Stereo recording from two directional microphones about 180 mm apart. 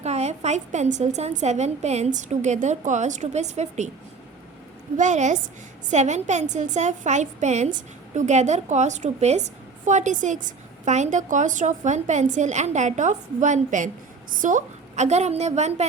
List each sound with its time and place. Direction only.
0.0 s a woman's voice: 40° right (ahead or behind)
4.9 s a woman's voice: 40° right (ahead or behind)